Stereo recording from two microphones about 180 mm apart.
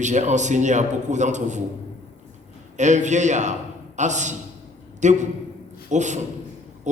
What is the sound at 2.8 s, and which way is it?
A man's voice, 40° right (ahead or behind).